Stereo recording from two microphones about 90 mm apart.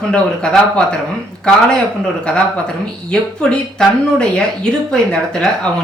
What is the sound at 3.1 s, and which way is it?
Speech, 10° left (ahead or behind).